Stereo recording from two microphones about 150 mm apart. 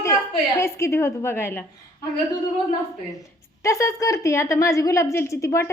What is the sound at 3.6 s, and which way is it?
A woman's voice, 20° left (ahead or behind).